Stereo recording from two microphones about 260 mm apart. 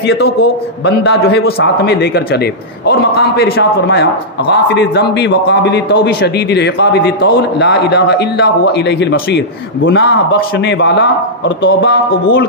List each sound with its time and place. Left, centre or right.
0.0 s a man's voice: left